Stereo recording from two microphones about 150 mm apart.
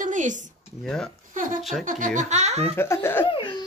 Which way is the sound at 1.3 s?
60° right (ahead or behind).